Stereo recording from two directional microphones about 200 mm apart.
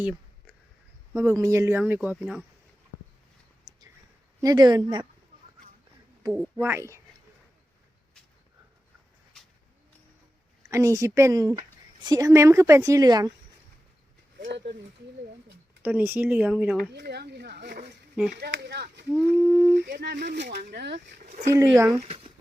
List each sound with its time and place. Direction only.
1.1 s a woman's voice: 15° right (ahead or behind)
3.7 s a sound: 20° right (ahead or behind)
4.4 s speech: 20° right (ahead or behind)
6.6 s a woman's voice: 15° right (ahead or behind)
10.7 s a woman's voice: 15° right (ahead or behind)
15.8 s a woman's voice: 10° right (ahead or behind)
16.9 s speech: 55° right (ahead or behind)
19.1 s a woman's voice: 10° right (ahead or behind)
19.9 s speech: 55° right (ahead or behind)
21.4 s a woman's voice: 15° right (ahead or behind)
21.9 s speech: 30° right (ahead or behind)